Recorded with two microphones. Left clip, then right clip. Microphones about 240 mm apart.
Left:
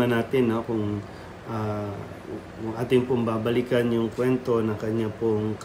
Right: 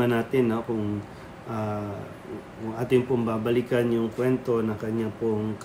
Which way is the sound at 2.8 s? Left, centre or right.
Centre.